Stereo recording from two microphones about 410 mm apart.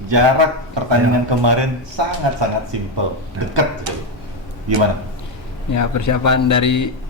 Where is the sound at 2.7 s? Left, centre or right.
Right.